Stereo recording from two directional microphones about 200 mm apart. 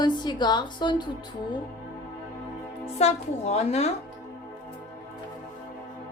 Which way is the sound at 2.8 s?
30° left (ahead or behind).